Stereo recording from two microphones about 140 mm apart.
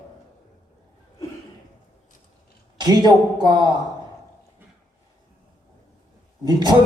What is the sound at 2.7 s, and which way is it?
Speech, 30° right (ahead or behind).